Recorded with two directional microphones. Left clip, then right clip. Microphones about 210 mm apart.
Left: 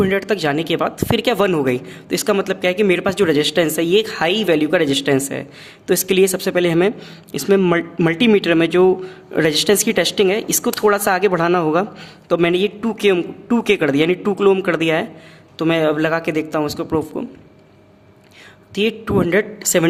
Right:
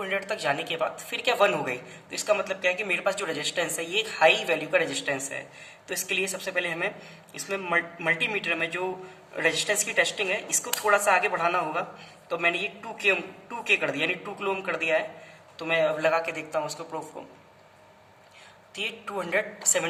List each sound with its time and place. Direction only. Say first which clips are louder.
0.0 s speech: left 11 dB; 45° left (ahead or behind)
18.7 s speech: left 13 dB; 45° left (ahead or behind)